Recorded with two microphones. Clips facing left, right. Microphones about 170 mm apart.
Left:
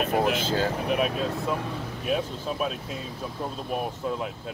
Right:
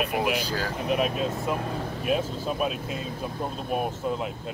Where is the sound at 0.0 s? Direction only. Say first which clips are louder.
Left 3 dB; 40° left (ahead or behind).